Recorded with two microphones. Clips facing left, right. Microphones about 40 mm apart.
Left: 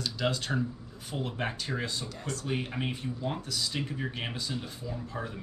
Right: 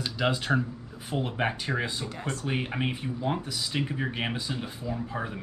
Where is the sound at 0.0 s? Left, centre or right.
Right.